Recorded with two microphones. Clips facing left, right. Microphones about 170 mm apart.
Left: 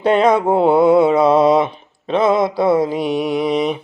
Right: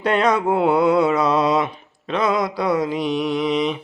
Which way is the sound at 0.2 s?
25° left (ahead or behind).